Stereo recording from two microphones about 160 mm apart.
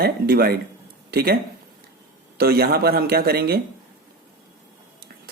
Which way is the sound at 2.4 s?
75° right (ahead or behind).